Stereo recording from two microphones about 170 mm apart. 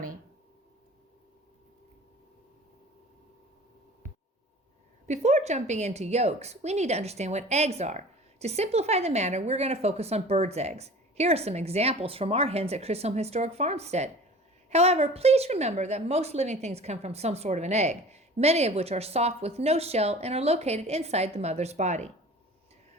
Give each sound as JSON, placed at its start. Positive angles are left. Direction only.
{"t": 5.0, "sound": "a woman's voice", "side_deg": -40}